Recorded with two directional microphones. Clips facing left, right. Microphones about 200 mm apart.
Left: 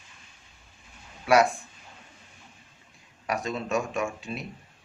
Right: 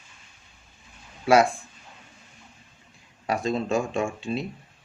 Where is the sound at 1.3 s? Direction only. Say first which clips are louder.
Right 2 dB; 25° right (ahead or behind).